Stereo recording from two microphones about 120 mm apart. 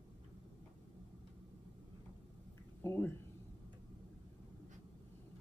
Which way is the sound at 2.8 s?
20° left (ahead or behind).